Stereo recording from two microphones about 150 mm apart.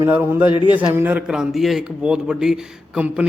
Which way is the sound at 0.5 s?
30° left (ahead or behind).